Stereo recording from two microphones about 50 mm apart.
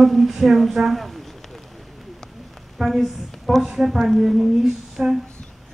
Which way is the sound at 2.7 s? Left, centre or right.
Centre.